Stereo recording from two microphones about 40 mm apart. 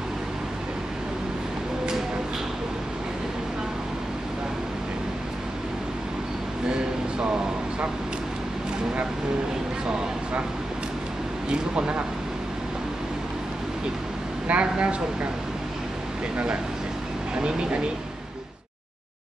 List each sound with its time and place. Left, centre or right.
11.4 s speech: right
14.5 s speech: right
17.4 s speech: right